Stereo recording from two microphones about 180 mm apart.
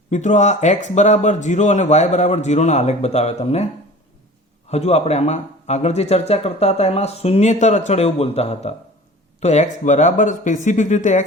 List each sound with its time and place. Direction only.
0.1 s speech: 40° left (ahead or behind)
4.7 s speech: 35° left (ahead or behind)